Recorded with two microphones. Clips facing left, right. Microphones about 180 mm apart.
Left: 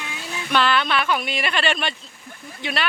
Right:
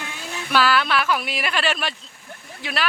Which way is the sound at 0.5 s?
5° right (ahead or behind).